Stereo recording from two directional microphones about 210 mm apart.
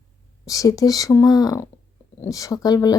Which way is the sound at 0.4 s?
15° left (ahead or behind).